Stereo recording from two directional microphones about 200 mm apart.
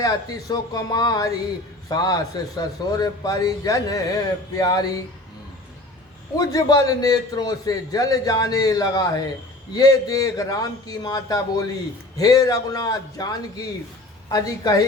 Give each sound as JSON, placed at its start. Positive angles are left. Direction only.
{"t": 0.0, "sound": "a man's voice", "side_deg": 20}
{"t": 6.4, "sound": "a man's voice", "side_deg": 20}